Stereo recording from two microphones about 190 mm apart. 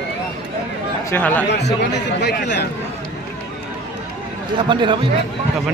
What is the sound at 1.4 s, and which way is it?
A man's voice, 65° left (ahead or behind).